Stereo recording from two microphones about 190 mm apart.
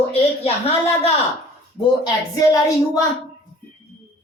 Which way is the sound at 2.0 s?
20° left (ahead or behind).